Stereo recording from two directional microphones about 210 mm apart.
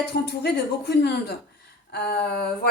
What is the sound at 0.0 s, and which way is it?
Speech, 50° left (ahead or behind).